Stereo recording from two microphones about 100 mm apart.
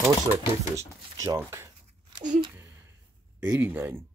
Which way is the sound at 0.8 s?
35° right (ahead or behind).